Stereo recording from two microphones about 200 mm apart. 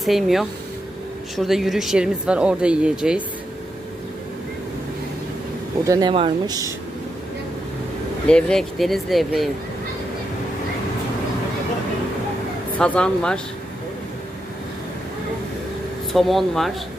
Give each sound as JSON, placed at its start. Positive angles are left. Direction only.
{"t": 0.0, "sound": "speech", "side_deg": 0}
{"t": 5.8, "sound": "speech", "side_deg": -20}
{"t": 8.3, "sound": "speech", "side_deg": 5}
{"t": 12.8, "sound": "speech", "side_deg": 5}
{"t": 16.1, "sound": "speech", "side_deg": 0}